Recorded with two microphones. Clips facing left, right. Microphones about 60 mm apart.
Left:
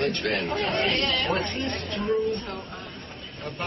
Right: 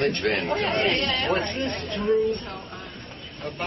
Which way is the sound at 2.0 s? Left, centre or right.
Centre.